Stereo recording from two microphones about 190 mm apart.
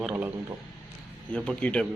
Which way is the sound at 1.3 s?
5° left (ahead or behind).